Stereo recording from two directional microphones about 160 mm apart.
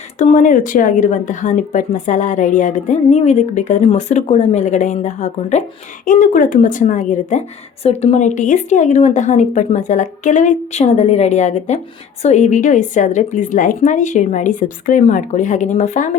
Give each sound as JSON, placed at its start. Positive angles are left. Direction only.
{"t": 0.2, "sound": "a woman's voice", "side_deg": 55}
{"t": 6.1, "sound": "a woman's voice", "side_deg": 55}